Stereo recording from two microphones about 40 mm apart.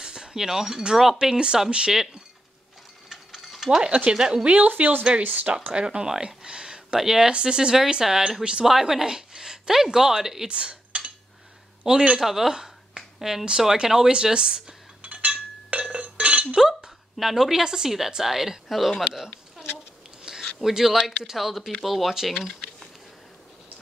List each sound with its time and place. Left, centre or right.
0.0 s a sound: centre
1.2 s speech: right
3.1 s mechanisms: centre
3.7 s speech: right
4.6 s speech: right
5.8 s a sound: right
7.0 s speech: centre
10.5 s cutlery: right
11.9 s speech: centre
15.0 s chink: right
17.2 s speech: centre
20.2 s a sound: centre
21.0 s speech: centre